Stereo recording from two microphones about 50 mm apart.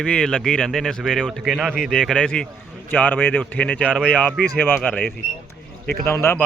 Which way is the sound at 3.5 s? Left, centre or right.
Left.